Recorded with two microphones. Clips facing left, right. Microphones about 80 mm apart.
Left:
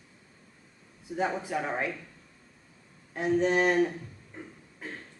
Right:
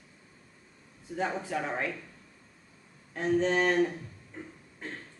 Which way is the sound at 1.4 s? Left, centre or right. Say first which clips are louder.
Left 1 dB; centre.